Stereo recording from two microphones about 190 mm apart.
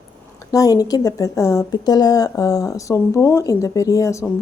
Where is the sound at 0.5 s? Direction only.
20° left (ahead or behind).